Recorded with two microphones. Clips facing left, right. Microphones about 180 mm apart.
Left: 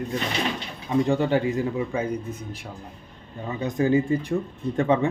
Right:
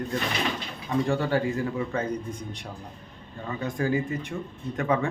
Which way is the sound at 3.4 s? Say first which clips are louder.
Left 4 dB; 20° left (ahead or behind).